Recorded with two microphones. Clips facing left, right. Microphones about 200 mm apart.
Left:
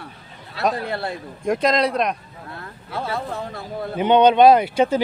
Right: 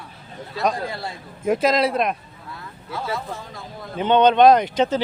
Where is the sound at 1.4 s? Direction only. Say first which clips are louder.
Right 1 dB; 5° right (ahead or behind).